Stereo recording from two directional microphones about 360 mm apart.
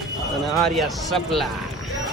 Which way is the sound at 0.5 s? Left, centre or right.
Centre.